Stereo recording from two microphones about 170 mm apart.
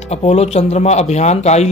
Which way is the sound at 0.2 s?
40° left (ahead or behind).